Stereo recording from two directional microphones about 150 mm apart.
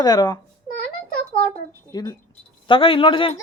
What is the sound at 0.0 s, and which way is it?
Speech, 25° left (ahead or behind).